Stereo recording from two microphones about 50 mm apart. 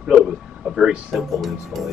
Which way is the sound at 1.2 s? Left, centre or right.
Centre.